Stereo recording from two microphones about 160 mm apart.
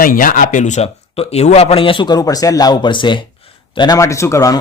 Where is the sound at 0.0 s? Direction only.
60° left (ahead or behind).